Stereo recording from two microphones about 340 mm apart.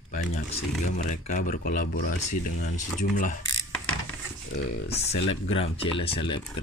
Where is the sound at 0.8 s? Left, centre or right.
Left.